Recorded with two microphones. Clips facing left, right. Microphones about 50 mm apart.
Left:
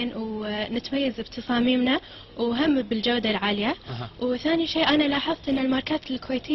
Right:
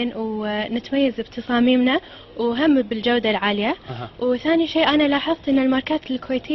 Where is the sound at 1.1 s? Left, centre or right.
Right.